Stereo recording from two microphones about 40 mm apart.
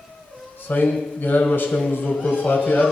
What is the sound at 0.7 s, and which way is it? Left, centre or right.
Speech, left.